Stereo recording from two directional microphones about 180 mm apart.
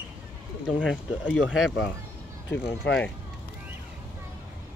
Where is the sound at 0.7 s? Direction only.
5° right (ahead or behind).